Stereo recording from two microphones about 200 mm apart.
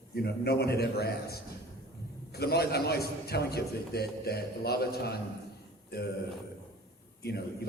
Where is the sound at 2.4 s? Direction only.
55° left (ahead or behind).